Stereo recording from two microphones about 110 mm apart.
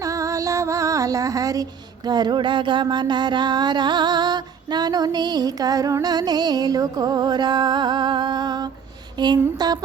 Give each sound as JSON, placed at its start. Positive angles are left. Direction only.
{"t": 0.0, "sound": "music", "side_deg": -30}